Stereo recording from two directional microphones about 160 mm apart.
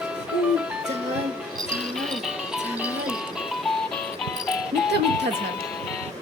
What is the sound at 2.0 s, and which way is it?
Music, centre (ahead or behind).